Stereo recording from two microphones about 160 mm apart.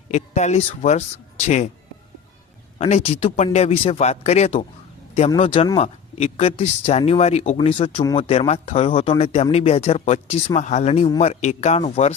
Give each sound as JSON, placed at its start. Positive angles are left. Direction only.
{"t": 0.1, "sound": "speech", "side_deg": 45}
{"t": 2.7, "sound": "a man's voice", "side_deg": 40}